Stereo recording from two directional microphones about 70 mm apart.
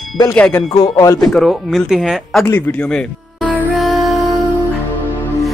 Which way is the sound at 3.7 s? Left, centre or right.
Centre.